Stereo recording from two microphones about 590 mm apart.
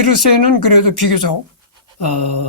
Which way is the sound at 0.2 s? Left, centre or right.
Left.